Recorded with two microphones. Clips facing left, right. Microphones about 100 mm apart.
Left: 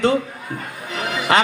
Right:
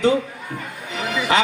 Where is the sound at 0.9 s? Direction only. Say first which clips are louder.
Left 1 dB; 40° left (ahead or behind).